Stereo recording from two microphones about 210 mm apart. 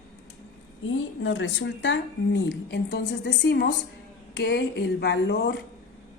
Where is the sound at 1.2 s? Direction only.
65° left (ahead or behind).